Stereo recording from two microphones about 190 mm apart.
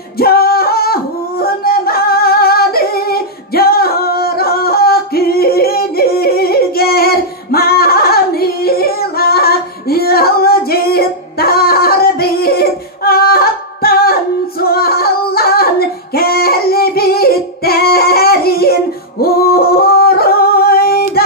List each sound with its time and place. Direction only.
0.2 s singing: 55° left (ahead or behind)